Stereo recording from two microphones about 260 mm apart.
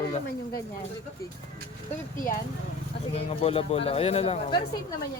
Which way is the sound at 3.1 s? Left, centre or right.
Left.